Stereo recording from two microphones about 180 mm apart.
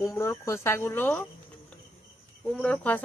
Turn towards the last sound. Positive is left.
turn(degrees=10)  # may be behind; listen again after turning